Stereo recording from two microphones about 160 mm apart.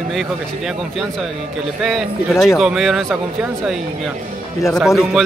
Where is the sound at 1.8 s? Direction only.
Centre (ahead or behind).